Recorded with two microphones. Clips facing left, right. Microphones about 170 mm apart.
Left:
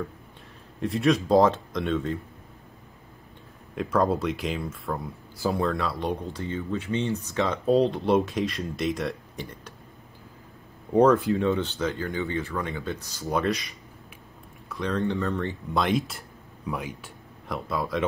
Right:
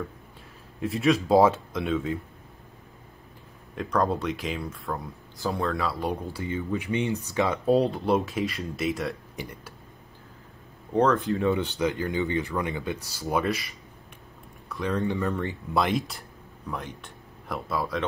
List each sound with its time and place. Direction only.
0.7 s speech: centre (ahead or behind)
3.7 s speech: centre (ahead or behind)
10.9 s speech: 10° left (ahead or behind)
11.2 s speech: centre (ahead or behind)
11.6 s speech: 15° right (ahead or behind)
13.3 s speech: centre (ahead or behind)